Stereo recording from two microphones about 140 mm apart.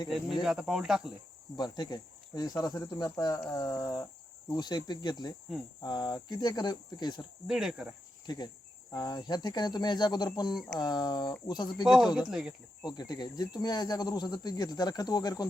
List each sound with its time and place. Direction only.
0.4 s speech: 5° right (ahead or behind)
1.5 s speech: 30° left (ahead or behind)
7.4 s speech: 5° right (ahead or behind)
8.9 s speech: 25° left (ahead or behind)
11.9 s speech: 5° right (ahead or behind)
12.8 s speech: 30° left (ahead or behind)